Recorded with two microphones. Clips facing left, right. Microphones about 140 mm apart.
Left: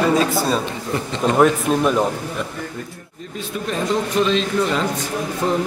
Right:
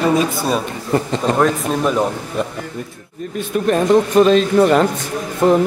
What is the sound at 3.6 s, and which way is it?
Speech, 55° right (ahead or behind).